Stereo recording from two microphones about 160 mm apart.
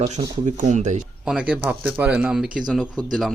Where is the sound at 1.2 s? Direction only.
5° right (ahead or behind).